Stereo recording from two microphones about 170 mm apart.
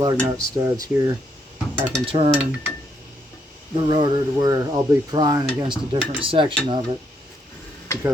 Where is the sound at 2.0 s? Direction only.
30° right (ahead or behind).